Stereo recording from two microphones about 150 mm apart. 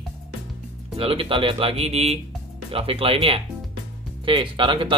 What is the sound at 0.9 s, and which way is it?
Speech, 40° right (ahead or behind).